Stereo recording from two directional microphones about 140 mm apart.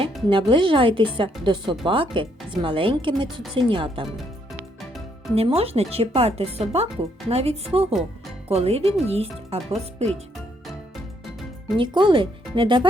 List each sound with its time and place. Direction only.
0.3 s a woman's voice: 40° right (ahead or behind)
5.3 s speech: 45° right (ahead or behind)
11.8 s a woman's voice: 35° right (ahead or behind)